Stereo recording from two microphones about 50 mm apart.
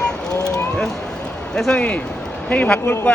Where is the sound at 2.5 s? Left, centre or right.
Left.